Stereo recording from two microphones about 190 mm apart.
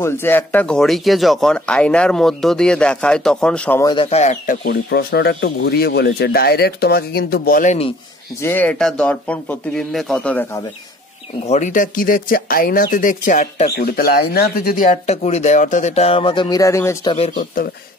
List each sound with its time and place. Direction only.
0.0 s speech: 10° left (ahead or behind)
3.8 s speech: 25° left (ahead or behind)
4.6 s speech: 55° left (ahead or behind); by 7.9 s 40° left (ahead or behind)
8.4 s a man's voice: 10° left (ahead or behind)
11.4 s speech: 40° left (ahead or behind); by 17.1 s 15° left (ahead or behind)
17.1 s speech: 30° left (ahead or behind)